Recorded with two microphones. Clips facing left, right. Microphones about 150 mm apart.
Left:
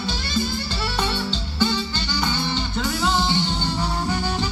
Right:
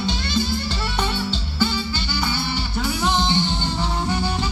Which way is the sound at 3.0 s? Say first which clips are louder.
Right 1 dB; 15° right (ahead or behind).